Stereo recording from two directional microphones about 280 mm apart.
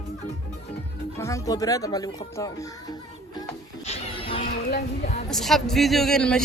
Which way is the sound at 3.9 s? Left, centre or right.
Centre.